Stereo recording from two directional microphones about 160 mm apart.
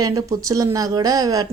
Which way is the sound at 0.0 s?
20° right (ahead or behind).